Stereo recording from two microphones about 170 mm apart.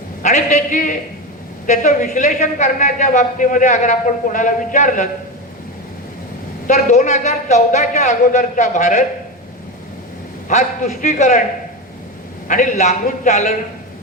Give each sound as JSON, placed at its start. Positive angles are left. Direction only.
{"t": 0.2, "sound": "a man's voice", "side_deg": 40}
{"t": 6.7, "sound": "a man's voice", "side_deg": 45}
{"t": 10.5, "sound": "a man's voice", "side_deg": 45}
{"t": 12.5, "sound": "a man's voice", "side_deg": 45}